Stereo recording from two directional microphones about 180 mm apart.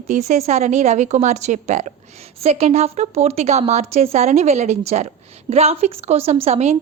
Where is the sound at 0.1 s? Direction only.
40° right (ahead or behind).